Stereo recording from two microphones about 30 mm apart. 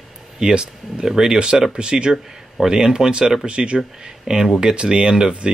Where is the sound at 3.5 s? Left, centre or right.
Right.